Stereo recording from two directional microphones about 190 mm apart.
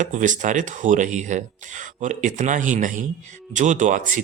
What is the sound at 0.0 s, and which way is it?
Speech, 40° right (ahead or behind).